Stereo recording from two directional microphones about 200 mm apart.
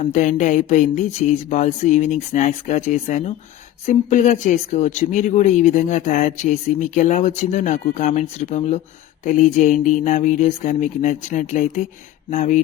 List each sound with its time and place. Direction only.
0.0 s speech: 40° left (ahead or behind)